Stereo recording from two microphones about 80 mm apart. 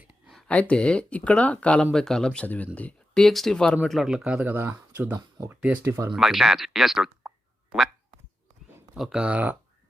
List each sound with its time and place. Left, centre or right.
0.4 s speech: centre
3.8 s speech: centre
4.5 s speech: right
5.5 s speech: centre
5.8 s speech: right
6.1 s speech: centre
9.0 s speech: centre